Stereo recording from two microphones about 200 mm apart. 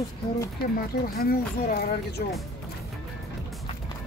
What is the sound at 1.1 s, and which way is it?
Speech, 50° left (ahead or behind).